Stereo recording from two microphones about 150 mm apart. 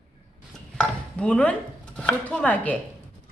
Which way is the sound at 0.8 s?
5° left (ahead or behind).